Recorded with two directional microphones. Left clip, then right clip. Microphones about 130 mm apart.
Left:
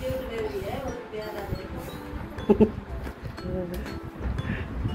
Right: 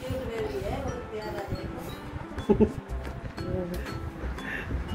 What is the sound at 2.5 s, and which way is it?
Speech, 5° right (ahead or behind).